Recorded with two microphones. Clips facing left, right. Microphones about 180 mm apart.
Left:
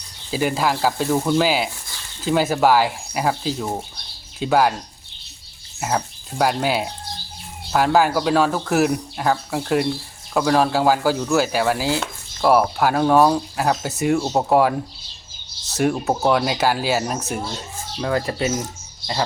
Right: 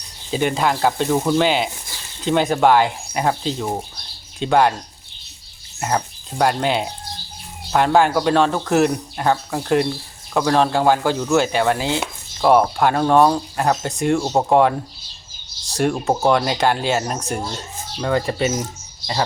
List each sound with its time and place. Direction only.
0.3 s speech: 5° left (ahead or behind)
5.8 s speech: 5° left (ahead or behind)